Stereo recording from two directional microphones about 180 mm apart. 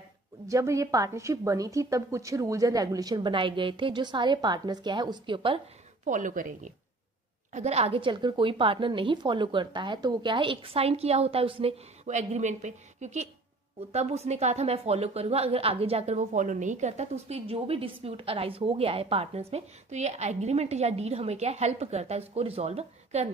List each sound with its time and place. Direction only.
0.5 s a woman's voice: 15° right (ahead or behind)
6.0 s a woman's voice: 45° right (ahead or behind)